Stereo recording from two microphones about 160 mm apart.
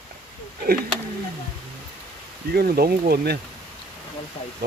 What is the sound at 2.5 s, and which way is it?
Speech, 75° right (ahead or behind).